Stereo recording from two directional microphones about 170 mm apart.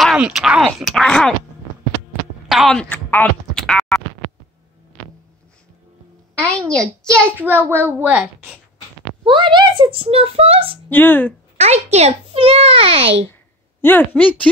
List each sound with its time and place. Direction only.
0.0 s speech: centre (ahead or behind)
2.4 s speech: centre (ahead or behind)
6.7 s speech: 5° left (ahead or behind)
7.3 s a child's voice: 10° right (ahead or behind)
9.2 s speech: 30° right (ahead or behind)
10.9 s speech: 10° left (ahead or behind)
11.5 s speech: 40° right (ahead or behind)
13.3 s speech: 10° left (ahead or behind)